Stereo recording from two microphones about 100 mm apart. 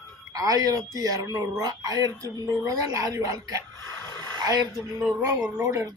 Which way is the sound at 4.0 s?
30° left (ahead or behind).